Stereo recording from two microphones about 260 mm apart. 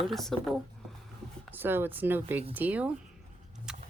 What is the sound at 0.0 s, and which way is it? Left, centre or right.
Speech, centre.